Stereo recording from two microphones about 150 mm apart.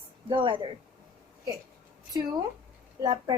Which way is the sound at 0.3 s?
35° right (ahead or behind).